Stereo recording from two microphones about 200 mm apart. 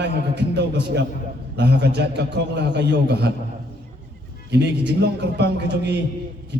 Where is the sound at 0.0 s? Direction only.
60° right (ahead or behind).